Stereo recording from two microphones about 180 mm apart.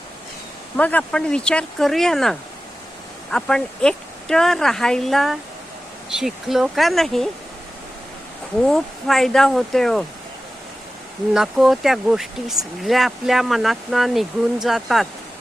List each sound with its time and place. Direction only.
0.8 s speech: 10° left (ahead or behind)
8.6 s speech: centre (ahead or behind)
11.3 s speech: centre (ahead or behind)